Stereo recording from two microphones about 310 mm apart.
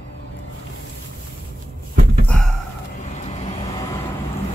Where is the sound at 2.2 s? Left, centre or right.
Centre.